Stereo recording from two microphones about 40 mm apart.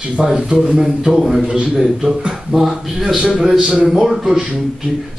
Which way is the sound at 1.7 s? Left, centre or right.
Centre.